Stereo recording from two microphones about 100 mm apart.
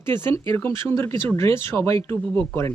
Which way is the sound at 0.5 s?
25° left (ahead or behind).